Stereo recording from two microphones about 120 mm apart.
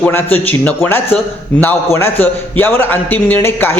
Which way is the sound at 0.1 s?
15° left (ahead or behind).